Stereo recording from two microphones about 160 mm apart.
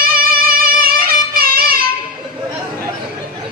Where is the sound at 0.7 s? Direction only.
65° right (ahead or behind).